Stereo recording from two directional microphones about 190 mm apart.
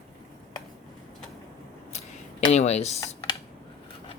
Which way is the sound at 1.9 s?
35° left (ahead or behind).